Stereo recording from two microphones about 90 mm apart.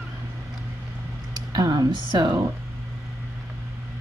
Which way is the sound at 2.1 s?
60° right (ahead or behind).